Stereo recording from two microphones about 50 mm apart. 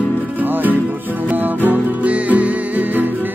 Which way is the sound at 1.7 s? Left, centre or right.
Right.